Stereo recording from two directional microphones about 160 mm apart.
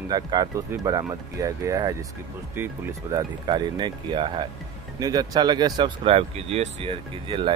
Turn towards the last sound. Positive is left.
turn(degrees=-35)  # may be behind; listen again after turning